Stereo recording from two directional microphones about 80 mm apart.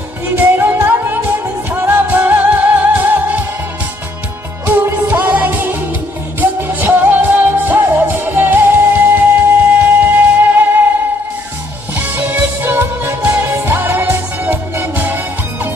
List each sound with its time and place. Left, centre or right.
0.3 s music: right
4.6 s music: right
11.9 s music: right